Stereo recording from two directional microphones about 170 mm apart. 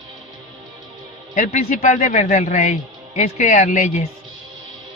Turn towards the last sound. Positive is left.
turn(degrees=50)  # may be behind; listen again after turning